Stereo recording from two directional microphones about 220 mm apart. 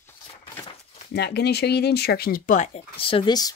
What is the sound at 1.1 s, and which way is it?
Speech, 50° left (ahead or behind).